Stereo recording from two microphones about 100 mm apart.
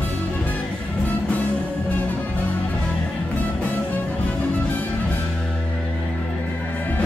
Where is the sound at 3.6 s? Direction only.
15° left (ahead or behind).